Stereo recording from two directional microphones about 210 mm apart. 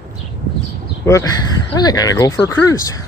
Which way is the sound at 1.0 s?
15° left (ahead or behind).